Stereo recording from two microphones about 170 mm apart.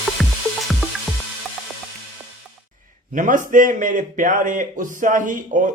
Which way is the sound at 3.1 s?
50° right (ahead or behind).